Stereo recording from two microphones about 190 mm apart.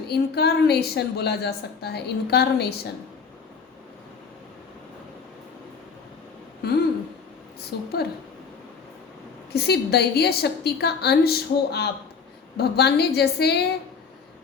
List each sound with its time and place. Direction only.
0.1 s a woman's voice: 60° left (ahead or behind)
6.6 s a sound: 55° left (ahead or behind)
7.7 s a woman's voice: 60° left (ahead or behind)
9.5 s a woman's voice: 60° left (ahead or behind)